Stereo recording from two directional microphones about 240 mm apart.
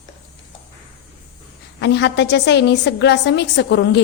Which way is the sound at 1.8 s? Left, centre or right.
Left.